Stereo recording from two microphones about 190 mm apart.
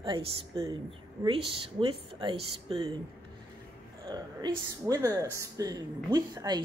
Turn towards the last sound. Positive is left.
turn(degrees=-20)  # may be behind; listen again after turning